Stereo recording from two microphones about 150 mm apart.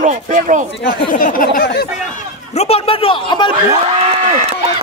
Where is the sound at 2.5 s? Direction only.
40° left (ahead or behind).